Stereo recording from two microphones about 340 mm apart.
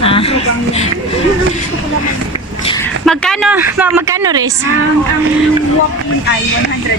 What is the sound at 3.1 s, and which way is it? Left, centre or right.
Speech, centre.